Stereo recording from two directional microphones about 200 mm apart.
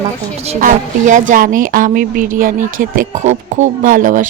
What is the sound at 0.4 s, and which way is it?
Speech, 40° right (ahead or behind).